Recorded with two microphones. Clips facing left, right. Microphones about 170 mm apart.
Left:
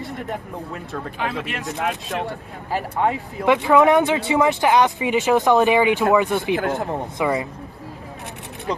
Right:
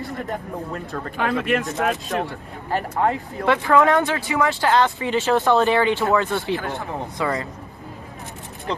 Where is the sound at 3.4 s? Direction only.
15° left (ahead or behind).